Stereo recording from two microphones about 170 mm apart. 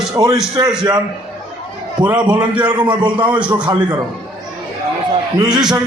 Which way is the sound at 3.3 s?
5° right (ahead or behind).